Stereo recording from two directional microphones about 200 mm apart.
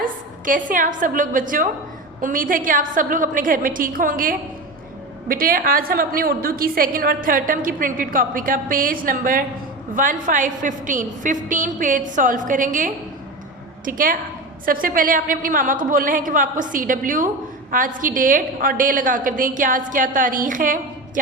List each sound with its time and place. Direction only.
0.0 s a woman's voice: 40° right (ahead or behind)